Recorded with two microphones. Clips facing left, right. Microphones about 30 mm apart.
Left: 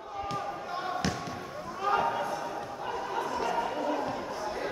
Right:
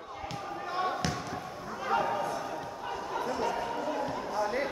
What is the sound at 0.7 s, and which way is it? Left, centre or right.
Basketball bounce, centre.